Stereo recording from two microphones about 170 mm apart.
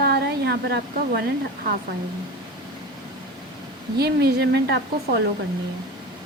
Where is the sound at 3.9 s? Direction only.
70° right (ahead or behind).